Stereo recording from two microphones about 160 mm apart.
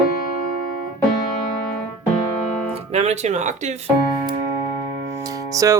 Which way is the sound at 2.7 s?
40° right (ahead or behind).